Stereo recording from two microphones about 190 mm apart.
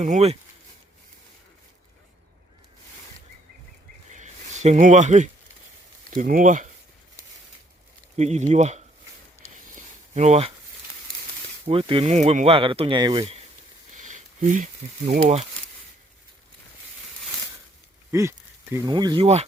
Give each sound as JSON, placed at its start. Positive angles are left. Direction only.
{"t": 0.0, "sound": "speech", "side_deg": -35}
{"t": 4.1, "sound": "a sound", "side_deg": -40}
{"t": 6.1, "sound": "speech", "side_deg": -45}
{"t": 8.1, "sound": "speech", "side_deg": -35}
{"t": 10.2, "sound": "speech", "side_deg": -35}
{"t": 11.7, "sound": "speech", "side_deg": -25}
{"t": 13.9, "sound": "a sound", "side_deg": -40}
{"t": 18.1, "sound": "speech", "side_deg": -15}